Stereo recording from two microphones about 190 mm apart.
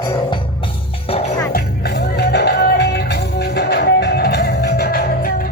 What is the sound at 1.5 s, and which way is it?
Music, 60° left (ahead or behind).